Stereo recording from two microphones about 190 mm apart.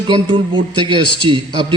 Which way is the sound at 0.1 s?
25° right (ahead or behind).